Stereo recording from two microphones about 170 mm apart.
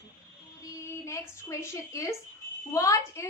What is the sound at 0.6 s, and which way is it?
A woman's voice, 15° left (ahead or behind).